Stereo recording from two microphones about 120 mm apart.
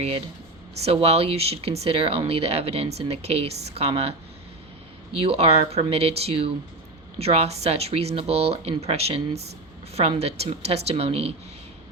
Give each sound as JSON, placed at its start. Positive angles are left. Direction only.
{"t": 0.9, "sound": "speech", "side_deg": -55}
{"t": 5.2, "sound": "speech", "side_deg": -55}